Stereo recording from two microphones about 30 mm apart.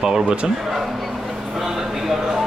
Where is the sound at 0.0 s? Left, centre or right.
Right.